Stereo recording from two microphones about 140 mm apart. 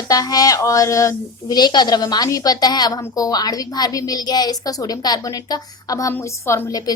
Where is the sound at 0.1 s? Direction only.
25° left (ahead or behind).